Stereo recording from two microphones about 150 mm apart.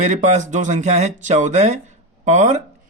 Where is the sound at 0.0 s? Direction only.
50° right (ahead or behind).